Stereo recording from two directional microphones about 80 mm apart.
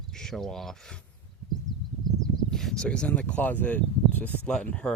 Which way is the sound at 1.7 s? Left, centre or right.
Left.